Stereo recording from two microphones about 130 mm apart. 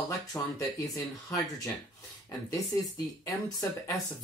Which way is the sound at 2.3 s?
25° left (ahead or behind).